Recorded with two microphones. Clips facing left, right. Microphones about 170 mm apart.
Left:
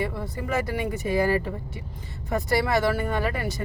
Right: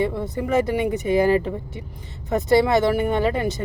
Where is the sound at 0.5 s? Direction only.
20° right (ahead or behind).